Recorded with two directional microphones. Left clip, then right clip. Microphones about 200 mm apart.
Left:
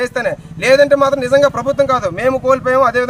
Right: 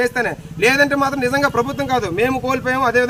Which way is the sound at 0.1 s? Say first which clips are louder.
Left 3 dB; 15° left (ahead or behind).